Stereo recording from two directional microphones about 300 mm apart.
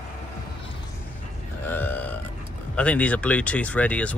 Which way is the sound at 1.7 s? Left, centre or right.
Centre.